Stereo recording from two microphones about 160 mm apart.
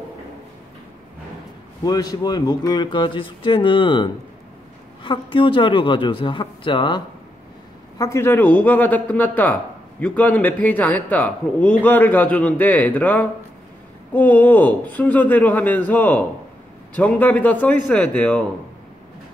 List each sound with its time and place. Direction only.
1.9 s a man's voice: 25° left (ahead or behind)
8.0 s a man's voice: 15° left (ahead or behind)